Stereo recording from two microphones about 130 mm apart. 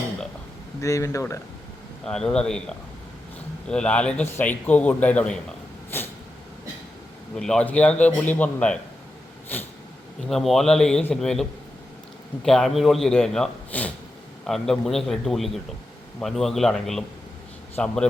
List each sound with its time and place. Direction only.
0.8 s speech: 25° left (ahead or behind)
2.0 s a man's voice: 5° left (ahead or behind)
5.9 s a sound: 15° left (ahead or behind)
7.3 s a man's voice: 5° left (ahead or behind)
10.2 s a man's voice: centre (ahead or behind)
12.5 s a man's voice: centre (ahead or behind)